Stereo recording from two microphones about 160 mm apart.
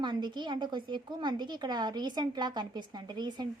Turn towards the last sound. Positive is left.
turn(degrees=-25)  # may be behind; listen again after turning